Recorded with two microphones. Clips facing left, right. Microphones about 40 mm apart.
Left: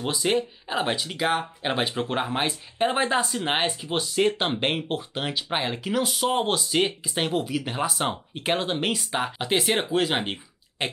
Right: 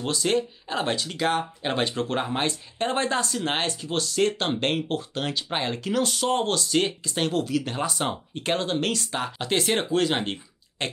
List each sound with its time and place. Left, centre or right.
0.0 s speech: centre